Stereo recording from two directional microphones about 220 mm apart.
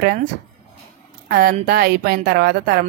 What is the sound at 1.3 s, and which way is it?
Speech, 45° right (ahead or behind).